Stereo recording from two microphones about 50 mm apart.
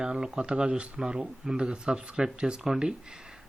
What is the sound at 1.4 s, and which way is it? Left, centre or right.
Speech, centre.